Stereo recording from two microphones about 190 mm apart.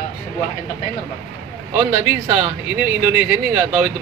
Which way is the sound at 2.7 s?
5° right (ahead or behind).